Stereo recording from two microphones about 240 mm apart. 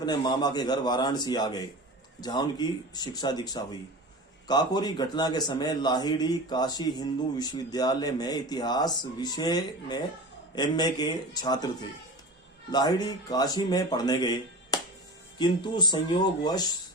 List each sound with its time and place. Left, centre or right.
0.0 s speech: centre
14.7 s music: centre
15.4 s speech: centre